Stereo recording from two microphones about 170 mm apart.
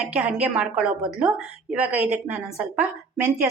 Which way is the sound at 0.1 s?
5° right (ahead or behind).